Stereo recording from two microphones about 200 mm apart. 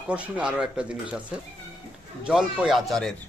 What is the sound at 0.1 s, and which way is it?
A man's voice, 5° right (ahead or behind).